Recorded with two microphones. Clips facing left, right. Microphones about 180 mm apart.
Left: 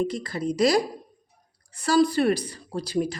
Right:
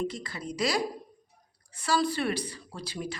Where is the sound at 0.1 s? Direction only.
40° left (ahead or behind).